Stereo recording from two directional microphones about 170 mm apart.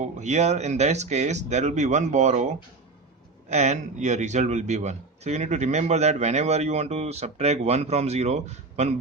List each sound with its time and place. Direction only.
0.2 s speech: 40° right (ahead or behind)
3.5 s a man's voice: 45° right (ahead or behind)